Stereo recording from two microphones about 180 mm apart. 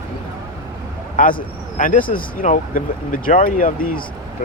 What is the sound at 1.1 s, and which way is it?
Speech, 50° left (ahead or behind).